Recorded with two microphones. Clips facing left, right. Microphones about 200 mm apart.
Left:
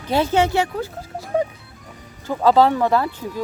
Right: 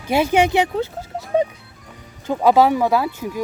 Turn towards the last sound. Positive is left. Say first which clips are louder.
# right 1 dB
turn(degrees=-10)  # may be behind; listen again after turning